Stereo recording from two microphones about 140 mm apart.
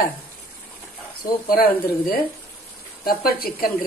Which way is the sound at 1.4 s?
90° left.